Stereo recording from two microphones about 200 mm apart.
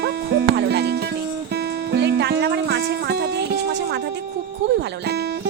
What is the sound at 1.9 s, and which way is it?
Music, 55° right (ahead or behind).